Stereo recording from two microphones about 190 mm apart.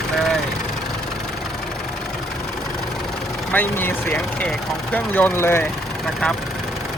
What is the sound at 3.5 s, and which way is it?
Speech, 10° left (ahead or behind).